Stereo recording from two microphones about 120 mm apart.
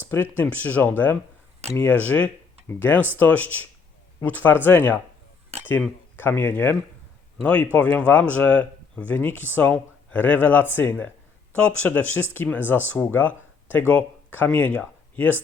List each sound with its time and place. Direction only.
0.0 s speech: 15° left (ahead or behind)
5.5 s dishes: 60° right (ahead or behind)
6.1 s speech: 15° left (ahead or behind)